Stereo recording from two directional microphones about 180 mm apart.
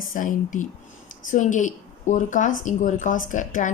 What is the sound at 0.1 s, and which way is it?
A woman's voice, 45° left (ahead or behind).